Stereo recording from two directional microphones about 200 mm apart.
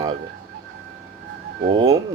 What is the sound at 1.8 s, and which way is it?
Speech, 15° right (ahead or behind).